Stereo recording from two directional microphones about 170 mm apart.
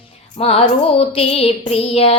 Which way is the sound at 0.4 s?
35° left (ahead or behind).